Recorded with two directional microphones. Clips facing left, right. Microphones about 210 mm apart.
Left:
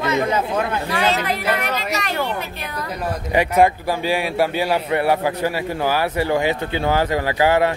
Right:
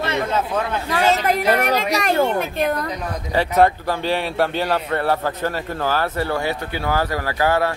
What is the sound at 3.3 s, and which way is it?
A man's voice, 10° left (ahead or behind).